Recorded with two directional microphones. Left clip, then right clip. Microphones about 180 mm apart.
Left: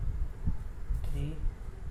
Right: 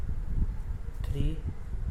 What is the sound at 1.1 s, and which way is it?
Mantra, 40° right (ahead or behind).